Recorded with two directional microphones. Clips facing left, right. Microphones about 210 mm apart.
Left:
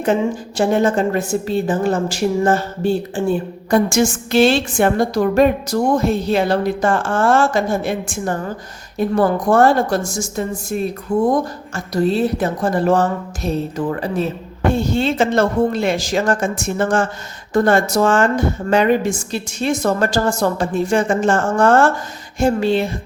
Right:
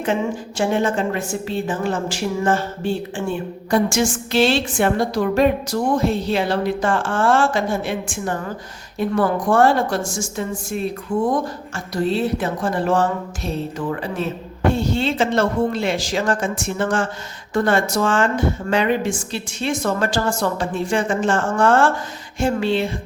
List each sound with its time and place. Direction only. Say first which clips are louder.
0.0 s a woman's voice: left 4 dB; 40° left (ahead or behind)